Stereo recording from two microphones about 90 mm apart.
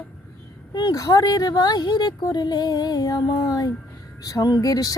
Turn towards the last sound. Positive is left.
turn(degrees=40)  # may be behind; listen again after turning